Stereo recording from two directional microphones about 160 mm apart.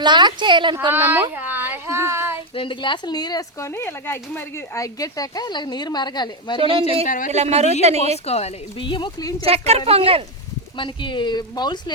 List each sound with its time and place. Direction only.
0.0 s speech: 30° right (ahead or behind)
0.9 s a woman's voice: 10° right (ahead or behind)
1.4 s child singing: 15° right (ahead or behind)
2.6 s speech: 30° left (ahead or behind)
6.6 s speech: 35° right (ahead or behind)
8.3 s speech: 40° left (ahead or behind)
9.4 s speech: 40° right (ahead or behind)
10.8 s speech: 30° left (ahead or behind)